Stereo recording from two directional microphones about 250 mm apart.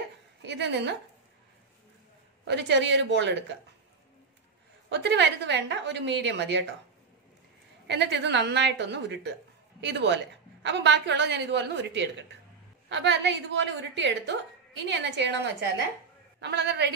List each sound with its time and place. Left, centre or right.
0.4 s a woman's voice: right
2.4 s a woman's voice: right
4.8 s a woman's voice: right
7.8 s a woman's voice: right